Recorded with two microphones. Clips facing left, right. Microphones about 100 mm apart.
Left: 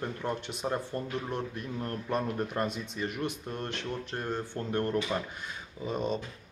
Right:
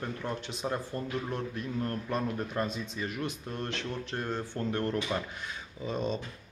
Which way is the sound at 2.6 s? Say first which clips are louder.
Left 1 dB; 65° left (ahead or behind).